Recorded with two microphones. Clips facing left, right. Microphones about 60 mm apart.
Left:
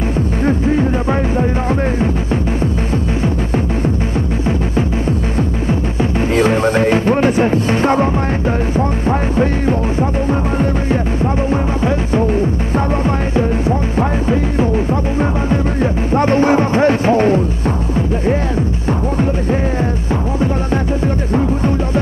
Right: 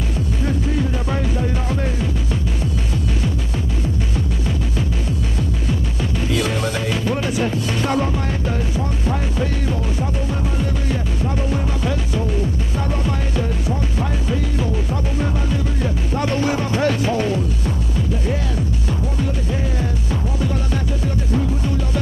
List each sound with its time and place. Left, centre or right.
0.5 s music: left
6.3 s music: left
11.5 s music: left
21.3 s music: left